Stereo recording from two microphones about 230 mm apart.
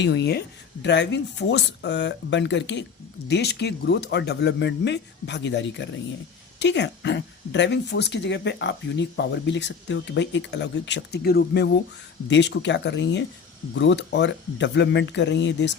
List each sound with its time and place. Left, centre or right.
0.0 s speech: left